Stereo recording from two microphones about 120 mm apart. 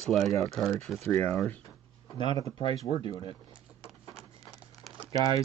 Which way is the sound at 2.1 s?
40° left (ahead or behind).